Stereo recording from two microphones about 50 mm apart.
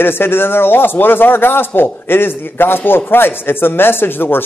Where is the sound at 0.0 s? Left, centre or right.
Left.